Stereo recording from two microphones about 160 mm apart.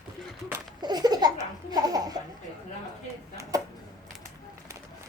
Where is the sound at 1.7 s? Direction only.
25° right (ahead or behind).